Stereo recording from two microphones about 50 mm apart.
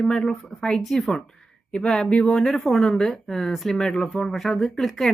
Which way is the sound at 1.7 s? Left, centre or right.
Centre.